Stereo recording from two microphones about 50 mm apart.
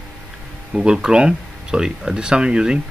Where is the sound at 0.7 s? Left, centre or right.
Centre.